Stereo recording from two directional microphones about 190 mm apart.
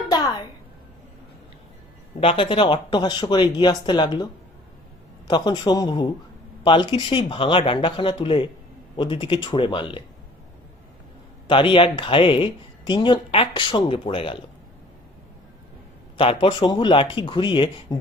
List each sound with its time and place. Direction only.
0.1 s a sound: 20° left (ahead or behind)
2.2 s speech: 25° left (ahead or behind)
5.3 s speech: 25° left (ahead or behind)
11.4 s speech: 25° left (ahead or behind)
16.1 s speech: 25° left (ahead or behind)